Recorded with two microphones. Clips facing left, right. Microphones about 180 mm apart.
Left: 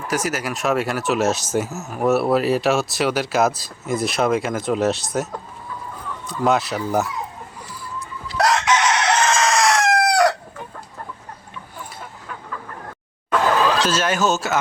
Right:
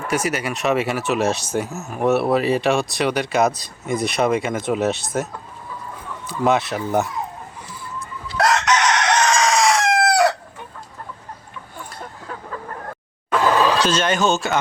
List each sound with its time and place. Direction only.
0.1 s speech: centre (ahead or behind)
8.4 s chicken: 5° left (ahead or behind)
13.8 s speech: 5° left (ahead or behind)